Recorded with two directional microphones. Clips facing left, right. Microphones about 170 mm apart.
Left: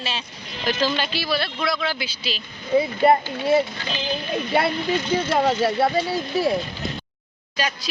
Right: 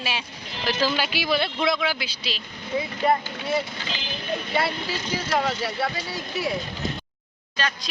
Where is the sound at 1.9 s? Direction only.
Centre (ahead or behind).